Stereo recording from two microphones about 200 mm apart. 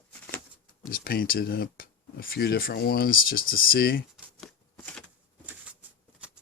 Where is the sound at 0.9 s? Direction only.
45° left (ahead or behind).